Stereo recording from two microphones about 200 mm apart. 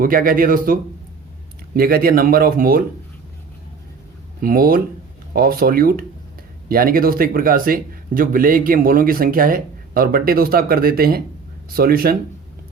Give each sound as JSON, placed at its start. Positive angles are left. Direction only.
{"t": 0.0, "sound": "speech", "side_deg": -45}
{"t": 4.4, "sound": "speech", "side_deg": -45}